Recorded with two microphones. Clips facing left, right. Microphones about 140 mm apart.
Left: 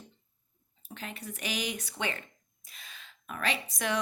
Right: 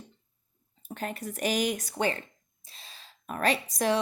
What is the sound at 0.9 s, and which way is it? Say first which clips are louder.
A woman's voice: right 7 dB; 45° right (ahead or behind).